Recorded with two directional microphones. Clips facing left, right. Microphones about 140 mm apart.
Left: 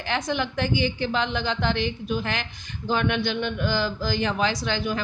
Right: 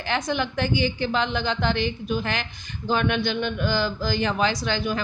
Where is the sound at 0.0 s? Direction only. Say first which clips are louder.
Right 1 dB; 45° right (ahead or behind).